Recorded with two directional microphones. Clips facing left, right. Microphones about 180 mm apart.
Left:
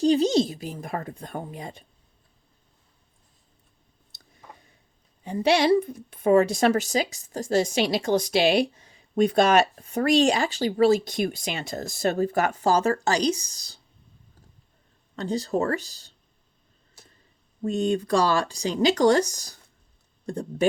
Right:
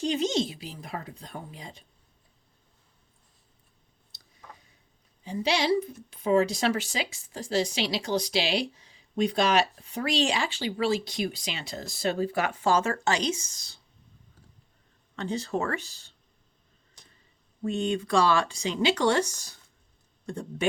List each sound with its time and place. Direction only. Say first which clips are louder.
0.0 s a woman's voice: left 7 dB; 35° left (ahead or behind); by 1.8 s 55° left (ahead or behind)
5.2 s a woman's voice: left 6 dB; 55° left (ahead or behind); by 13.7 s 35° left (ahead or behind)
15.1 s speech: left 4 dB; 35° left (ahead or behind)
17.7 s speech: left 4 dB; 40° left (ahead or behind)